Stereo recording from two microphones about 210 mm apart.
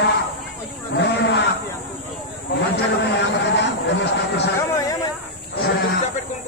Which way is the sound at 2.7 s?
55° left (ahead or behind).